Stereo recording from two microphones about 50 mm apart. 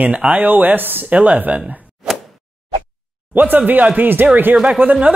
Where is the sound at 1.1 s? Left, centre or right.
Right.